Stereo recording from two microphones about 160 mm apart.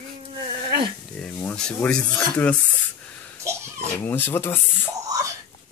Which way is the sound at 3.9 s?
10° left (ahead or behind).